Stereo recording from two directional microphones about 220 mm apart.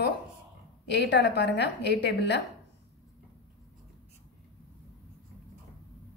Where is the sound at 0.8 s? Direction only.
50° left (ahead or behind).